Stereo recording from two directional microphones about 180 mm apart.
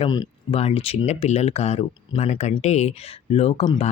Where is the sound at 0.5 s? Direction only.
35° left (ahead or behind).